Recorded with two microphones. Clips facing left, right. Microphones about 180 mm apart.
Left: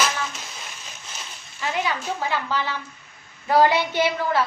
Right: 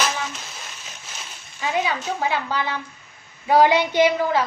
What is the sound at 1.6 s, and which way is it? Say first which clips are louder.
A woman's voice: right 2 dB; 10° right (ahead or behind).